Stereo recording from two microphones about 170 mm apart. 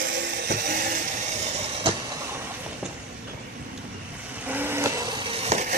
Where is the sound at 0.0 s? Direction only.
90° right.